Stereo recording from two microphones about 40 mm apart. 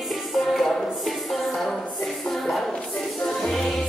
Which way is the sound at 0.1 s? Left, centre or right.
Centre.